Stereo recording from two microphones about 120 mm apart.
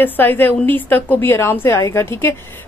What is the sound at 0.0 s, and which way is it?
A woman's voice, 15° left (ahead or behind).